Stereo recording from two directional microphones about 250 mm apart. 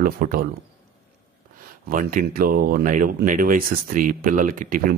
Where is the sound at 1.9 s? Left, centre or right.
Right.